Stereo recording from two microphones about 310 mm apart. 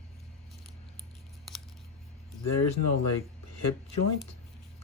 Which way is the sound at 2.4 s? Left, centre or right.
Left.